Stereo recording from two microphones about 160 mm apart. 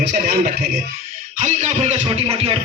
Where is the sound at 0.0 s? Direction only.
70° right (ahead or behind).